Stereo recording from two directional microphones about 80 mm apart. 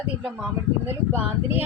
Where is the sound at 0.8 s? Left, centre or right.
Right.